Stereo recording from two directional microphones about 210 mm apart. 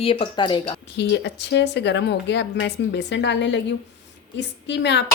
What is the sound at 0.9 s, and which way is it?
Speech, 55° left (ahead or behind).